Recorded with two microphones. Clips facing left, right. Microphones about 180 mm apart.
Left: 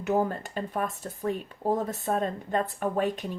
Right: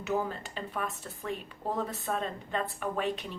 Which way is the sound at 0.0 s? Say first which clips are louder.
Left 5 dB; 50° left (ahead or behind).